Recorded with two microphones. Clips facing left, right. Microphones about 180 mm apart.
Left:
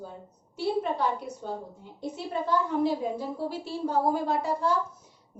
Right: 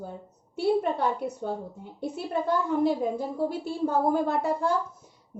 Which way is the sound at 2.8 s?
50° right (ahead or behind).